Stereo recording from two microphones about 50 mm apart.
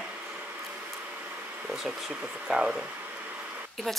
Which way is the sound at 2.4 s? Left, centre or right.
Centre.